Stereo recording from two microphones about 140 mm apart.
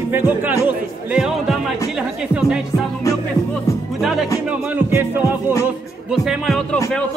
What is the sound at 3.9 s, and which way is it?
Speech, centre (ahead or behind).